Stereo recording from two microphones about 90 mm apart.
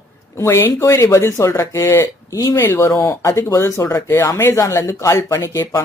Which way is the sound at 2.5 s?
25° left (ahead or behind).